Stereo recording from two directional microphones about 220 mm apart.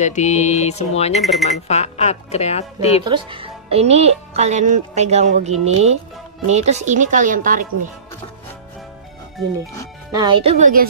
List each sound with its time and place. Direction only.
0.0 s a sound: 30° left (ahead or behind)
1.2 s speech: centre (ahead or behind)
1.7 s speech: 30° left (ahead or behind)
3.1 s speech: 25° right (ahead or behind); by 7.6 s 40° right (ahead or behind)
10.1 s speech: 20° right (ahead or behind)